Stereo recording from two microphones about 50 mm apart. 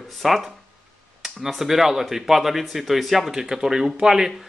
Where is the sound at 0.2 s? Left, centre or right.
Centre.